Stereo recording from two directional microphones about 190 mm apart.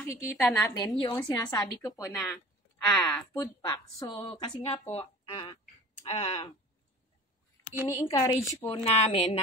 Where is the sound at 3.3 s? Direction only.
20° left (ahead or behind).